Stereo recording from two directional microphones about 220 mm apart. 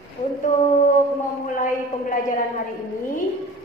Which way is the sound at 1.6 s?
35° left (ahead or behind).